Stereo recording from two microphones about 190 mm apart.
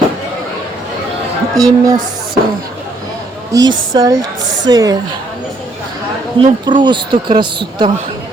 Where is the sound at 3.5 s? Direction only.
20° right (ahead or behind).